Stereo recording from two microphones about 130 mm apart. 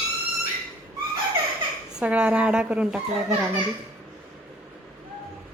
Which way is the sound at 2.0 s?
10° right (ahead or behind).